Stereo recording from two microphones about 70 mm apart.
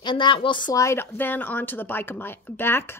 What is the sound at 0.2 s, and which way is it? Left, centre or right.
Speech, left.